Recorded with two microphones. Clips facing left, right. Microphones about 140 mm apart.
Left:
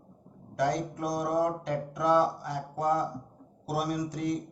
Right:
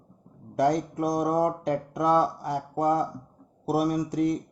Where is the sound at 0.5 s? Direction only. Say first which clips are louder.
Right 5 dB; 50° right (ahead or behind).